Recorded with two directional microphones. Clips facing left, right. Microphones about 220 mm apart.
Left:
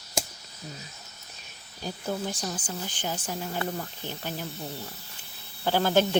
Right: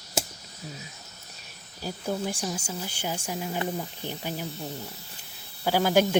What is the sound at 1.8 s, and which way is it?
Speech, 10° right (ahead or behind).